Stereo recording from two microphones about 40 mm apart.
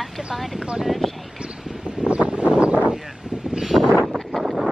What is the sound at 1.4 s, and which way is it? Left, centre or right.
Boat, centre.